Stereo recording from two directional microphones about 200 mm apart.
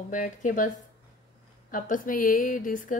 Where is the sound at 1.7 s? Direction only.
40° left (ahead or behind).